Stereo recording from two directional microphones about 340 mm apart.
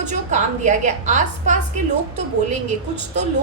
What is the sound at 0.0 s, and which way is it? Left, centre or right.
A woman's voice, right.